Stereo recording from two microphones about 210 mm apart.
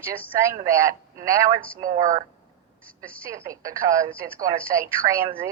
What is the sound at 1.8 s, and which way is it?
Speech, 35° right (ahead or behind).